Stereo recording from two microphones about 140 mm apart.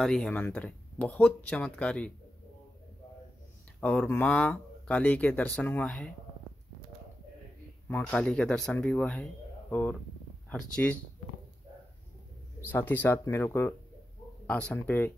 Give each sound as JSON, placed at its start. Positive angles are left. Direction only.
{"t": 0.0, "sound": "speech", "side_deg": 5}
{"t": 3.8, "sound": "speech", "side_deg": 10}
{"t": 7.9, "sound": "speech", "side_deg": 5}
{"t": 12.6, "sound": "speech", "side_deg": 15}